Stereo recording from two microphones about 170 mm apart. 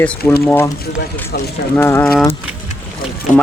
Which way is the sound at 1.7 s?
15° left (ahead or behind).